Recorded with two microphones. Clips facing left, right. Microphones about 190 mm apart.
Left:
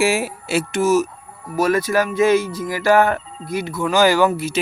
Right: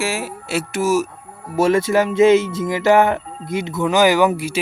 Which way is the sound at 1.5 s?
25° right (ahead or behind).